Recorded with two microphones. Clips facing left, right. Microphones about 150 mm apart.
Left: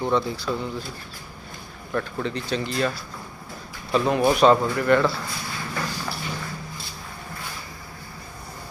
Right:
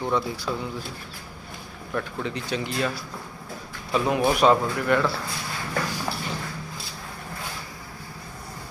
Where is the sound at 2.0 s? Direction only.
10° right (ahead or behind).